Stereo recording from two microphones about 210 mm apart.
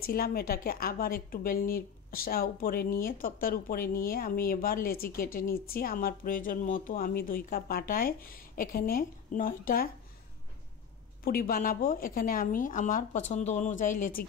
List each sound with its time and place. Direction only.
0.0 s speech: 45° left (ahead or behind)
11.2 s speech: 45° left (ahead or behind)